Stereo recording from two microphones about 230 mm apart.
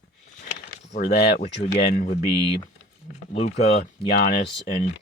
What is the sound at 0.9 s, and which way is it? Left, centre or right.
Speech, left.